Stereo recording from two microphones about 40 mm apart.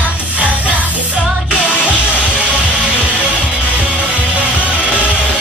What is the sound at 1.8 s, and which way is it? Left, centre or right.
Music, right.